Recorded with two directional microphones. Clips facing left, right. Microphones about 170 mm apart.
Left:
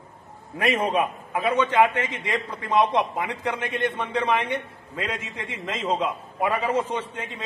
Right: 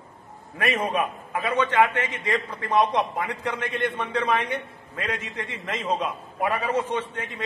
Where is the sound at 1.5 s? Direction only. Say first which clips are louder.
Even; 10° left (ahead or behind).